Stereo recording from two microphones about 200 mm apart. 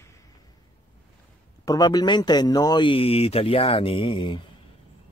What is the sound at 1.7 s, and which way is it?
A man's voice, 20° left (ahead or behind).